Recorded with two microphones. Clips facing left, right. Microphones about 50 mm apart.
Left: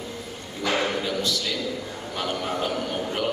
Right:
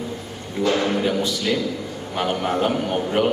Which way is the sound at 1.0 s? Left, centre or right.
Right.